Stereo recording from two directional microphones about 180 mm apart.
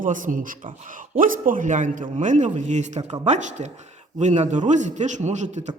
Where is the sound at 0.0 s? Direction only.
45° right (ahead or behind).